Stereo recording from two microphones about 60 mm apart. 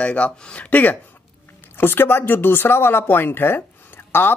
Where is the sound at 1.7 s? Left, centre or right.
Left.